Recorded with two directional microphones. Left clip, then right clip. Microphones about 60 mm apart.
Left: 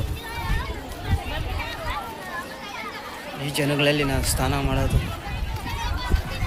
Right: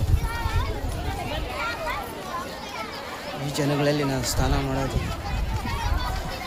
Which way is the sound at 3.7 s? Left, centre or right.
Left.